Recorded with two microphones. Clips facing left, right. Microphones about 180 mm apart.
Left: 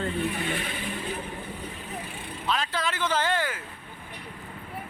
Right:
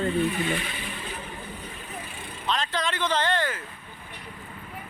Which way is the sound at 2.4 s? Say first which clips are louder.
Right 1 dB; 5° left (ahead or behind).